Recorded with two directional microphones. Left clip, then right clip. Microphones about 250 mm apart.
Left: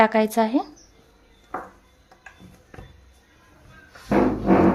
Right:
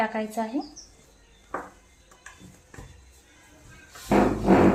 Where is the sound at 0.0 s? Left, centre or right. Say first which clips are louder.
Left 9 dB; left.